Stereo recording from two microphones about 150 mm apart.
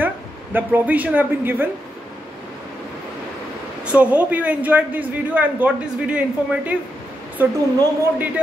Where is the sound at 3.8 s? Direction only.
10° right (ahead or behind).